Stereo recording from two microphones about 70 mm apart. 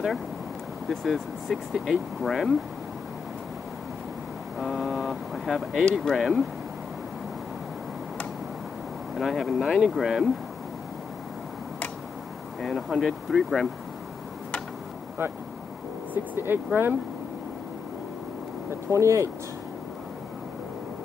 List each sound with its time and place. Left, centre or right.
0.8 s speech: centre
4.6 s speech: centre
9.1 s speech: centre
12.6 s speech: centre
16.1 s speech: right
18.9 s speech: right